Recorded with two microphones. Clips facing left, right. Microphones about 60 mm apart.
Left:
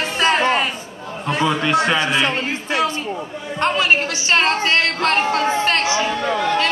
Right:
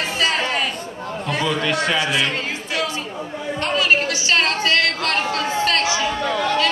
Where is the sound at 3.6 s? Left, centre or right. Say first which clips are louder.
Left 2 dB; left.